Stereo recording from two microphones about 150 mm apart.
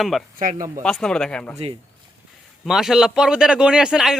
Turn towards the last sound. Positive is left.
turn(degrees=-5)  # may be behind; listen again after turning